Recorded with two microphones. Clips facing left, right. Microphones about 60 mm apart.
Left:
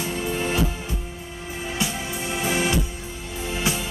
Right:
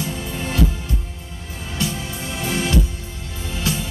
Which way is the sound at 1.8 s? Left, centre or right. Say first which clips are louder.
Right 3 dB; left.